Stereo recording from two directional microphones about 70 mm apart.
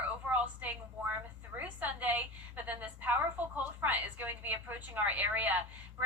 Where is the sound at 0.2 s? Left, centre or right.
Right.